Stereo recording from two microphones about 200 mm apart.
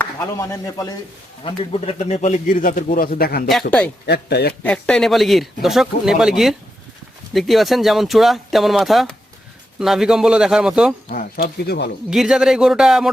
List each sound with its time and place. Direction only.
0.0 s speech: 15° left (ahead or behind)
1.5 s speech: 30° left (ahead or behind); by 3.5 s 50° left (ahead or behind)
3.7 s a man's voice: 5° left (ahead or behind)
4.0 s a man's voice: 55° left (ahead or behind)
4.6 s speech: 5° left (ahead or behind)
11.1 s speech: 45° left (ahead or behind)
12.1 s speech: centre (ahead or behind)